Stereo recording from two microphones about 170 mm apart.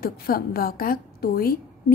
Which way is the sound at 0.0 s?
65° left (ahead or behind).